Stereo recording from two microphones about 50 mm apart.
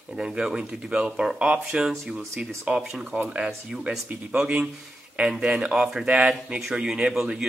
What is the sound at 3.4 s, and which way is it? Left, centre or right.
Speech, centre.